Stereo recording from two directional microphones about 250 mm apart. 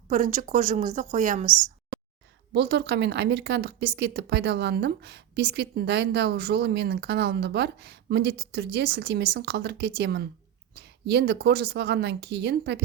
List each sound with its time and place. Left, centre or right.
0.1 s a woman's voice: right